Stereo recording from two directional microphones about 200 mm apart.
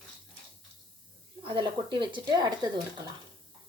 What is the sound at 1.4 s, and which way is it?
Speech, 25° right (ahead or behind).